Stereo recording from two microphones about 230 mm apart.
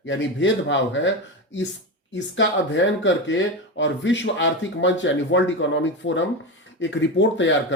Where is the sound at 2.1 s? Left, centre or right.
Left.